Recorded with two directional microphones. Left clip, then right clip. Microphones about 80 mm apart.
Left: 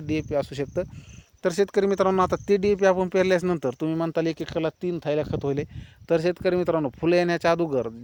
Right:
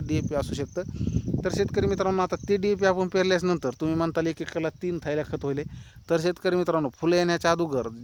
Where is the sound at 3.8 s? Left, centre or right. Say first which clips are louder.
Even; right.